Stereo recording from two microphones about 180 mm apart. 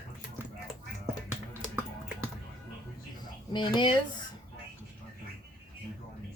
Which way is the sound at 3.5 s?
25° left (ahead or behind).